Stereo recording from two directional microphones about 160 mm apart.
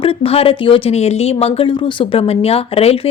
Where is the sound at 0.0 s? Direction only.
35° left (ahead or behind).